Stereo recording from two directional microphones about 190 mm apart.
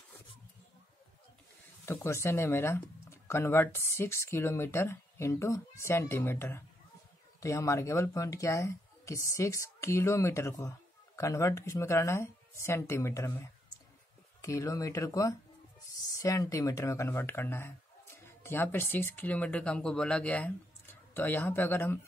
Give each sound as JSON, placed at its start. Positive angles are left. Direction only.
{"t": 1.9, "sound": "speech", "side_deg": 15}
{"t": 14.4, "sound": "speech", "side_deg": 15}